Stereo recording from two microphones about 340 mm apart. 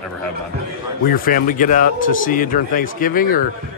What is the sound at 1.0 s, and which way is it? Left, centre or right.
Speech, left.